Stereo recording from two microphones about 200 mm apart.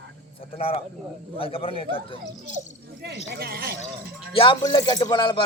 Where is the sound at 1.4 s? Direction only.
25° left (ahead or behind).